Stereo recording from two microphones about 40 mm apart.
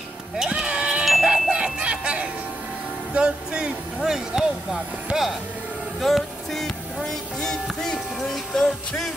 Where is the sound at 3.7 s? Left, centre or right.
Centre.